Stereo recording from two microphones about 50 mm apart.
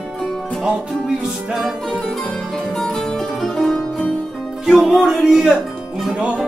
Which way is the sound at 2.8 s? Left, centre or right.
Centre.